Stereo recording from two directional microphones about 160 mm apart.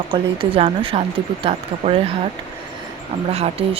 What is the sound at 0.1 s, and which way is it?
Speech, 35° right (ahead or behind).